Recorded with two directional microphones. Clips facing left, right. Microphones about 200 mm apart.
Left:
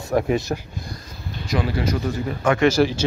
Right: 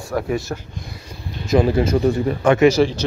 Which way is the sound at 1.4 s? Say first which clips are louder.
Right 7 dB; 25° right (ahead or behind).